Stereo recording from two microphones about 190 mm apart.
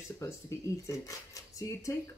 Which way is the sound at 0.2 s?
15° left (ahead or behind).